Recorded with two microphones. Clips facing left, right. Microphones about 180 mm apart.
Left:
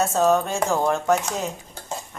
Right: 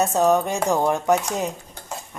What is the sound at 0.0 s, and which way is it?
A woman's voice, 15° right (ahead or behind).